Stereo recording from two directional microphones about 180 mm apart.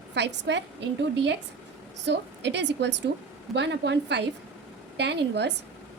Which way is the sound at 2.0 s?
75° right (ahead or behind).